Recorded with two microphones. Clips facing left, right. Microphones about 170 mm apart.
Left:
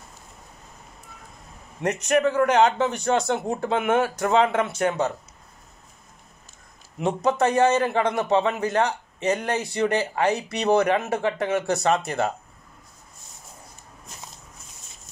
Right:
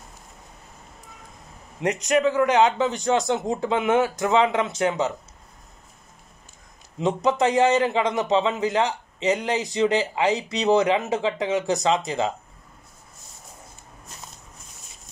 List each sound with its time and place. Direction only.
1.8 s a man's voice: 15° right (ahead or behind)
7.0 s a man's voice: 20° right (ahead or behind)